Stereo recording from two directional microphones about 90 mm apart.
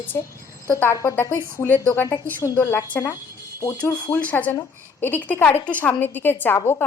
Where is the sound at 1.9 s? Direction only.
35° left (ahead or behind).